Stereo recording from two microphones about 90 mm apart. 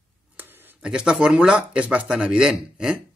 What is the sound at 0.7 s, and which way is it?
Speech, 10° right (ahead or behind).